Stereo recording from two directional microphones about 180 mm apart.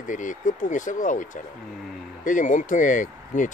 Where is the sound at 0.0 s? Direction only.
45° left (ahead or behind).